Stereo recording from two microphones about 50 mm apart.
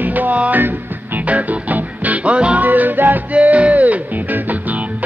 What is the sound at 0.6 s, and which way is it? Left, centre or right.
Music, right.